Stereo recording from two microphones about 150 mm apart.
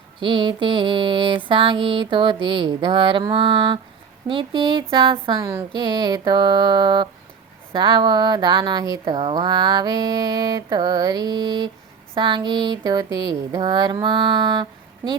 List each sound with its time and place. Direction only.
0.2 s mantra: 35° right (ahead or behind)
5.4 s speech: 20° right (ahead or behind)
12.1 s mantra: 30° right (ahead or behind)